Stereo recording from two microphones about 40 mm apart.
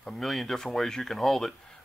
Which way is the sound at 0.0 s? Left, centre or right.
Centre.